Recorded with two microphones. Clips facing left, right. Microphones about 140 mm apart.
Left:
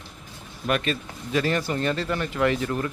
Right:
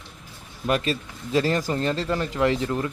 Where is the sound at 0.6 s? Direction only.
30° right (ahead or behind).